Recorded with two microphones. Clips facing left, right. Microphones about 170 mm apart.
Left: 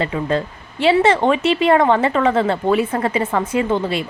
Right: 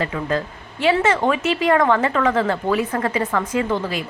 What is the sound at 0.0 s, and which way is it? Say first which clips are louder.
Speech: left 3 dB; 25° left (ahead or behind).